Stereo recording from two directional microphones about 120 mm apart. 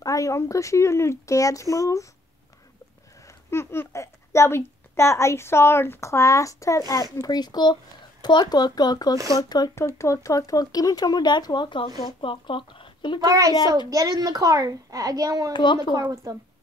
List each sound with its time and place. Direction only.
0.0 s a child's voice: 25° left (ahead or behind)
3.4 s a child's voice: 20° left (ahead or behind); by 13.2 s 45° left (ahead or behind)
13.2 s a woman's voice: 30° right (ahead or behind)
15.5 s speech: 40° left (ahead or behind)
15.9 s a woman's voice: 35° right (ahead or behind)